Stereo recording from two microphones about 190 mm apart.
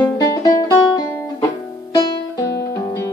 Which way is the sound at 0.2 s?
20° left (ahead or behind).